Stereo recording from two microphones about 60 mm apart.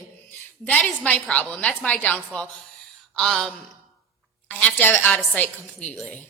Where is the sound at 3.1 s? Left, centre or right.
Centre.